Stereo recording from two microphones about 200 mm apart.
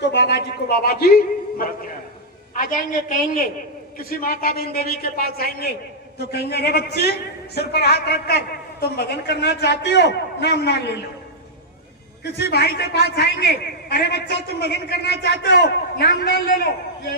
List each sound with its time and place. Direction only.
0.0 s a man's voice: 60° left (ahead or behind)
12.2 s a man's voice: 55° left (ahead or behind)